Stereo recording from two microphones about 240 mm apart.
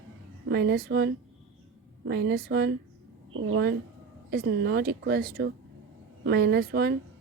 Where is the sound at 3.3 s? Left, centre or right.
Right.